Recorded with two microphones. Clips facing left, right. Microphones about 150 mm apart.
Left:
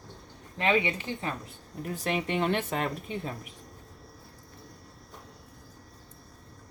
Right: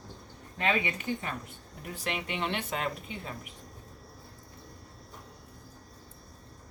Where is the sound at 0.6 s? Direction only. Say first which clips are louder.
Left 3 dB; 30° left (ahead or behind).